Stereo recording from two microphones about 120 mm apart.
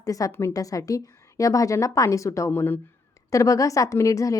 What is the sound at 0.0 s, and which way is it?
A woman's voice, 30° left (ahead or behind).